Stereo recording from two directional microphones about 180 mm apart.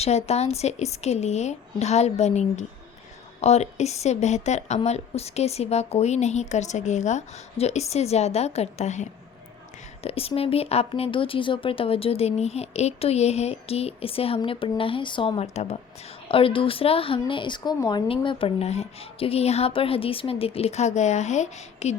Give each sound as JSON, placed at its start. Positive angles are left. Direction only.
{"t": 0.3, "sound": "speech", "side_deg": 35}